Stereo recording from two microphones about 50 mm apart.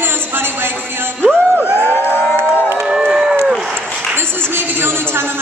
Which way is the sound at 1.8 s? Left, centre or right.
Left.